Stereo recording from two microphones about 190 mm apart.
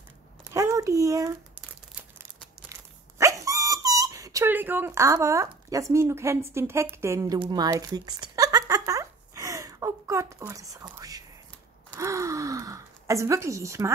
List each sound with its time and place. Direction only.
0.5 s a sound: 15° right (ahead or behind)
2.7 s dog: 15° right (ahead or behind)
6.5 s speech: 15° right (ahead or behind)
11.9 s gasp: 15° right (ahead or behind)